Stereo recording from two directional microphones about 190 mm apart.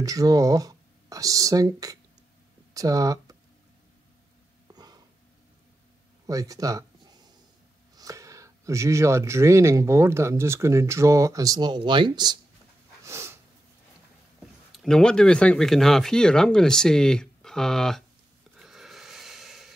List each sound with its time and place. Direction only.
0.0 s speech: 20° right (ahead or behind)
4.7 s a sound: 20° right (ahead or behind)
6.2 s speech: 20° right (ahead or behind)
7.9 s speech: 20° right (ahead or behind)
13.0 s snort: 15° right (ahead or behind)
14.4 s speech: centre (ahead or behind)
18.6 s wheeze: centre (ahead or behind)